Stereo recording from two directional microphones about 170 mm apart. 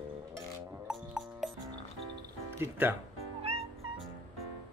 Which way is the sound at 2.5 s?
15° right (ahead or behind).